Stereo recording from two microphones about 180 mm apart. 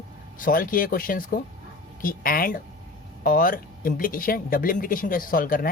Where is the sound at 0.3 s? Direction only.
50° left (ahead or behind).